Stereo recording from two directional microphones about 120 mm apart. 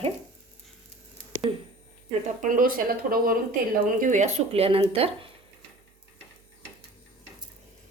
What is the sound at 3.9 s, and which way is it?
Speech, 90° right.